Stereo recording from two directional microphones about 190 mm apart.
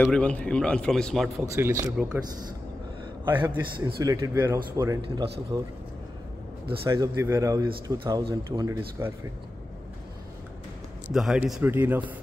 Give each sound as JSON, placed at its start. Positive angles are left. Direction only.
{"t": 0.0, "sound": "a man's voice", "side_deg": 5}
{"t": 1.4, "sound": "a man's voice", "side_deg": -15}
{"t": 3.8, "sound": "a man's voice", "side_deg": -20}
{"t": 6.9, "sound": "a man's voice", "side_deg": -15}
{"t": 8.5, "sound": "a man's voice", "side_deg": -15}
{"t": 11.1, "sound": "a man's voice", "side_deg": -5}